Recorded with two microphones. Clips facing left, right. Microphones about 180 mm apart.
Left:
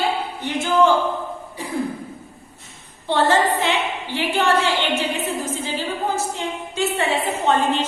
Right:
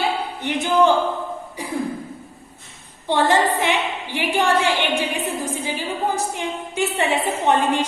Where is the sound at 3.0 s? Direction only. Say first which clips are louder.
Even; 15° right (ahead or behind).